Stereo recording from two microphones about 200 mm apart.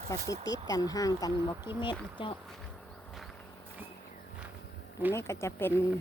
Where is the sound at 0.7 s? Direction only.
20° left (ahead or behind).